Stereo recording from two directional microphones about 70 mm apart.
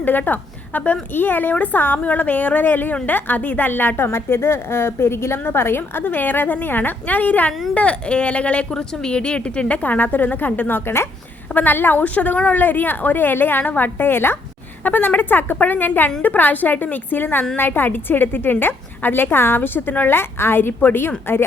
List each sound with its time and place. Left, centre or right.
0.0 s a woman's voice: left